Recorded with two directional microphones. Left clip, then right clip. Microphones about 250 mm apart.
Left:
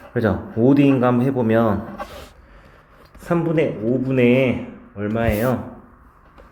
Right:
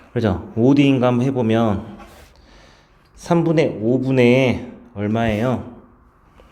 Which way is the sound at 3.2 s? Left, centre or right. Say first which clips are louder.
Right 2 dB; right.